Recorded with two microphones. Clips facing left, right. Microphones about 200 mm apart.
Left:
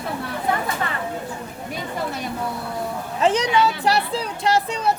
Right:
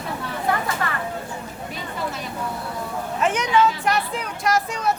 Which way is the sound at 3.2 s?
35° left (ahead or behind).